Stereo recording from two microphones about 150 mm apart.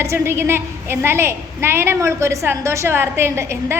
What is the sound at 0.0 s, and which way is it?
A woman's voice, 15° right (ahead or behind).